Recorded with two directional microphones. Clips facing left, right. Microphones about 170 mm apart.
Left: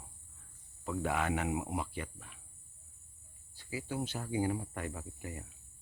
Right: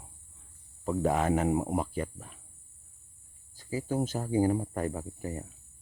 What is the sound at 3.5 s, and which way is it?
Speech, 40° right (ahead or behind).